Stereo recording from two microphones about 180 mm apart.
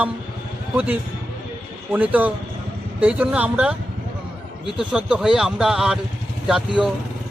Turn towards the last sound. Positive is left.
turn(degrees=-5)  # may be behind; listen again after turning